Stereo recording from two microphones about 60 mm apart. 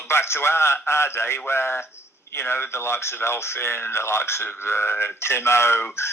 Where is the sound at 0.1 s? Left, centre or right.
Left.